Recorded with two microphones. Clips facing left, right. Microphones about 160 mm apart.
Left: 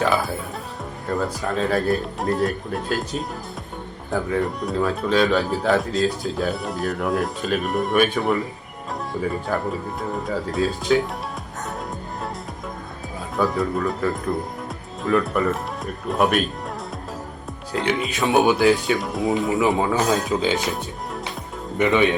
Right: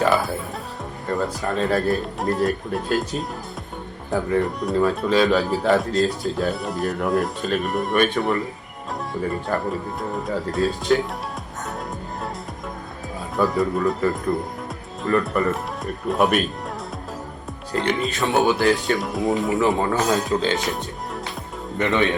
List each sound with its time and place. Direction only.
0.0 s speech: centre (ahead or behind)
13.3 s speech: centre (ahead or behind)
17.7 s speech: centre (ahead or behind)
18.3 s speech: 15° left (ahead or behind)
18.5 s speech: centre (ahead or behind)